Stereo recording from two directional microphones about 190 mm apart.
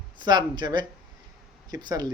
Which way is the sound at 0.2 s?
25° right (ahead or behind).